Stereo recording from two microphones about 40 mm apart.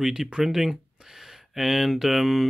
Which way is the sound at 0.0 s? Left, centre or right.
Centre.